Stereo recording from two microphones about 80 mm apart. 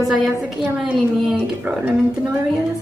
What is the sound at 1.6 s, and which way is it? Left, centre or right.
Speech, centre.